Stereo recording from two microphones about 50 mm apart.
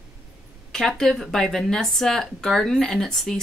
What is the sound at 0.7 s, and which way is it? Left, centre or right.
Speech, centre.